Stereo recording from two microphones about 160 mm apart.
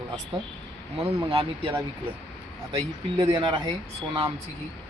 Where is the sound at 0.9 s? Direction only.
35° right (ahead or behind).